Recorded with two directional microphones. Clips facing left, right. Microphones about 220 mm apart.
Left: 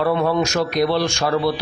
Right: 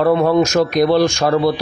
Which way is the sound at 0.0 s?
40° right (ahead or behind).